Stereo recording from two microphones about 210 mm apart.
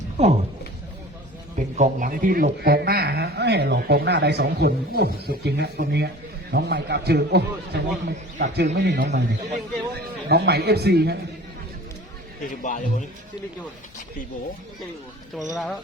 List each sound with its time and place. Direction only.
1.5 s a man's voice: 35° right (ahead or behind); by 11.2 s 50° right (ahead or behind)
12.6 s speech: 35° left (ahead or behind)
15.4 s speech: centre (ahead or behind)